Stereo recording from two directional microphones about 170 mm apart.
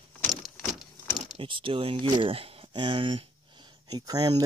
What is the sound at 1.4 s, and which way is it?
Speech, 30° right (ahead or behind).